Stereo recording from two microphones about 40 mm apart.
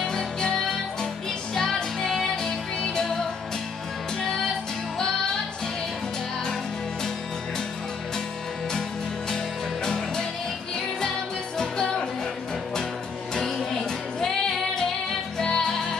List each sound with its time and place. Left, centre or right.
0.0 s music: centre
4.9 s music: centre
9.8 s music: centre
11.5 s music: centre
13.7 s music: centre